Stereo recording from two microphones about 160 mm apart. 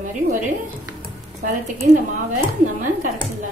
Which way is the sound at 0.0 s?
50° right (ahead or behind).